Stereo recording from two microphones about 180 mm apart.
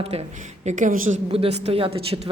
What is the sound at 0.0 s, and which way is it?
Speech, 35° right (ahead or behind).